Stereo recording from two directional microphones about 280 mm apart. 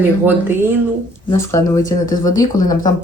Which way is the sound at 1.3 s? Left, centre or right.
Centre.